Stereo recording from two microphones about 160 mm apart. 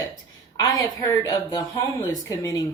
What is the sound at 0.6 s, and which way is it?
Speech, 15° left (ahead or behind).